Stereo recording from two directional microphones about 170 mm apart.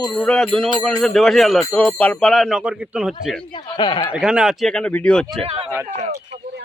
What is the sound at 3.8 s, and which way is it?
Speech, 25° left (ahead or behind).